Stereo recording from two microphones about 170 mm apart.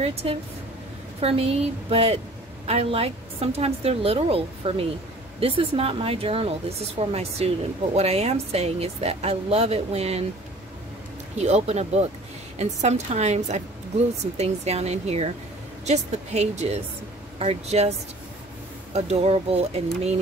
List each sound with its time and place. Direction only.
0.0 s a woman's voice: 35° right (ahead or behind)
11.4 s a woman's voice: 40° right (ahead or behind)
18.9 s a woman's voice: 35° right (ahead or behind)